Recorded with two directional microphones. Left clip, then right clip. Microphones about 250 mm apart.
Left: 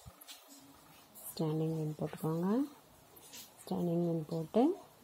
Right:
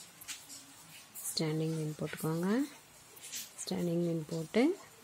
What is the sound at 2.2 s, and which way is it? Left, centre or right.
Speech, centre.